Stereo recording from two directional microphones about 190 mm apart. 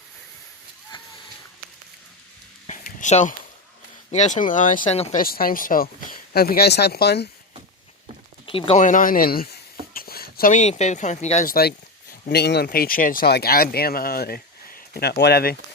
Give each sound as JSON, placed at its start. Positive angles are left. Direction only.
{"t": 2.6, "sound": "a sound", "side_deg": 40}
{"t": 4.1, "sound": "speech", "side_deg": 40}
{"t": 5.2, "sound": "speech", "side_deg": 50}
{"t": 8.4, "sound": "speech", "side_deg": 30}
{"t": 12.3, "sound": "speech", "side_deg": 60}